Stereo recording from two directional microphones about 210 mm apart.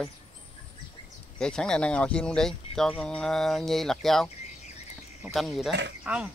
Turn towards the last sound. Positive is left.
turn(degrees=-5)  # may be behind; listen again after turning